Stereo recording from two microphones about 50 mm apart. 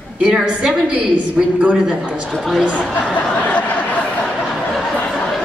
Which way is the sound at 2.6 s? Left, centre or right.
Centre.